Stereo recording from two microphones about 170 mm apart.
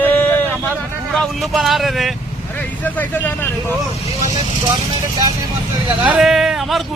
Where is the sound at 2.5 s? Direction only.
10° left (ahead or behind).